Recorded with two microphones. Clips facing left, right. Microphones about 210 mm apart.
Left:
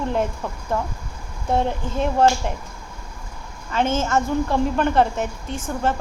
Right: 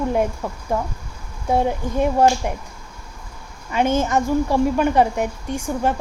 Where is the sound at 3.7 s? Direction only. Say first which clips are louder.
Right 2 dB; 15° right (ahead or behind).